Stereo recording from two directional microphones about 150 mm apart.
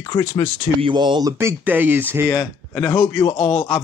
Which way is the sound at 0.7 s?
35° right (ahead or behind).